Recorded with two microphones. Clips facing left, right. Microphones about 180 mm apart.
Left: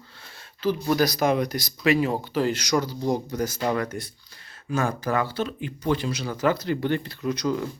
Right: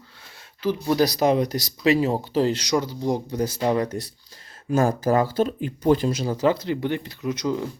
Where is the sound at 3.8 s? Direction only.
35° right (ahead or behind).